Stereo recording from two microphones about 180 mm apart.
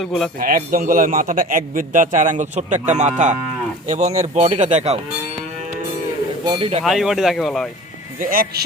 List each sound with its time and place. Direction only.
0.0 s speech: centre (ahead or behind)
0.3 s a man's voice: 55° right (ahead or behind); by 4.9 s 35° right (ahead or behind)
6.4 s speech: 25° right (ahead or behind)
6.8 s speech: centre (ahead or behind)
8.2 s a man's voice: 55° right (ahead or behind)